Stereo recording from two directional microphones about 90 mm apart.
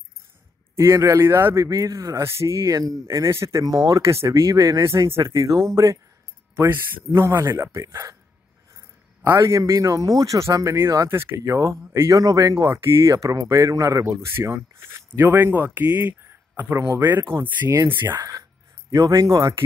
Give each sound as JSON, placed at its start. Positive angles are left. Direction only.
{"t": 0.7, "sound": "speech", "side_deg": -35}
{"t": 14.2, "sound": "speech", "side_deg": -30}
{"t": 18.9, "sound": "speech", "side_deg": -40}